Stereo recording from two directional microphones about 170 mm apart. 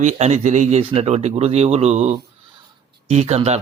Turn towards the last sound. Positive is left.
turn(degrees=-40)  # may be behind; listen again after turning